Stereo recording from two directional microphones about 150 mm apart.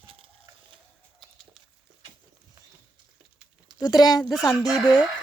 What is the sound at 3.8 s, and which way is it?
Speech, 25° left (ahead or behind).